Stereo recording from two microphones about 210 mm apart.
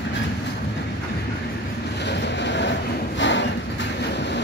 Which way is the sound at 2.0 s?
55° left (ahead or behind).